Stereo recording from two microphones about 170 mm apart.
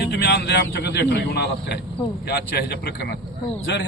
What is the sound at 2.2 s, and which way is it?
Speech, 70° left (ahead or behind).